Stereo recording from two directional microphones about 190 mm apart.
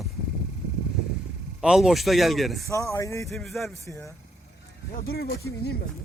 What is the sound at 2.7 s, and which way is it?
Speech, 15° left (ahead or behind).